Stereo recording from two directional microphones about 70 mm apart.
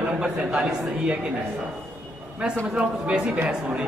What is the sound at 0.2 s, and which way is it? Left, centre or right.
Speech, centre.